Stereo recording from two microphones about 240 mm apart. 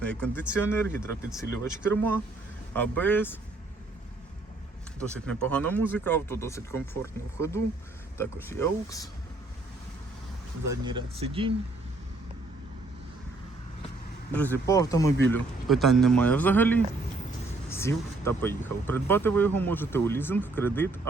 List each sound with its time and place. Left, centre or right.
0.0 s speech: centre
5.2 s speech: centre
10.8 s speech: right
14.3 s speech: centre
15.3 s speech: centre